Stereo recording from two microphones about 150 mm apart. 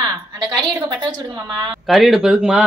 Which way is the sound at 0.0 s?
30° right (ahead or behind).